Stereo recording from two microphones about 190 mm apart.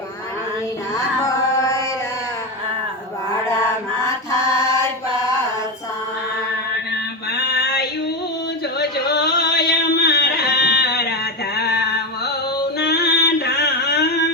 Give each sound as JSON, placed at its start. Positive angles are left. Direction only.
{"t": 1.2, "sound": "carnatic music", "side_deg": 15}
{"t": 4.0, "sound": "mantra", "side_deg": 15}
{"t": 7.3, "sound": "a sound", "side_deg": 60}
{"t": 8.8, "sound": "music", "side_deg": 60}